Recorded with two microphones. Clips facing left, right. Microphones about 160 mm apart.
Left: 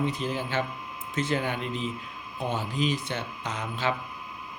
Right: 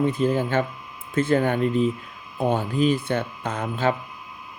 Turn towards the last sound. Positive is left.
turn(degrees=-50)  # may be behind; listen again after turning